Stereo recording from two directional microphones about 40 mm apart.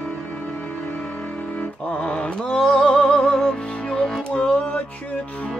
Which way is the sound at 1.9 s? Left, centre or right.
Left.